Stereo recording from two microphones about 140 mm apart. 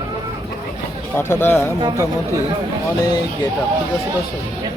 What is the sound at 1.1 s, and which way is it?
Speech, 15° left (ahead or behind).